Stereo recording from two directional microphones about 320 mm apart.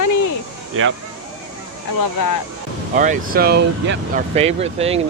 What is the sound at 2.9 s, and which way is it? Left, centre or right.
Speech, right.